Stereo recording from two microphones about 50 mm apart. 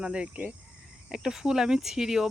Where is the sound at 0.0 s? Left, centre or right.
Right.